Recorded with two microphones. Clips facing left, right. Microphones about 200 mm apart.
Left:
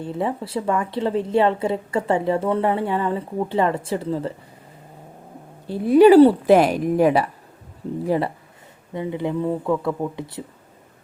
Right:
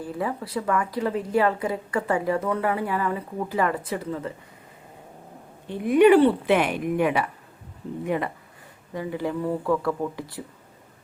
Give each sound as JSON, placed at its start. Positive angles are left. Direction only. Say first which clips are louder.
{"t": 0.0, "sound": "a woman's voice", "louder": "left 4 dB", "side_deg": 25}
{"t": 5.6, "sound": "speech", "louder": "left 4 dB", "side_deg": 35}
{"t": 8.9, "sound": "a woman's voice", "louder": "left 3 dB", "side_deg": 25}